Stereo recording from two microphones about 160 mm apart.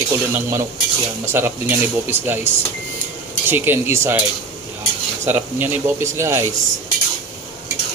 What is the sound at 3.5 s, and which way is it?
Speech, 15° right (ahead or behind).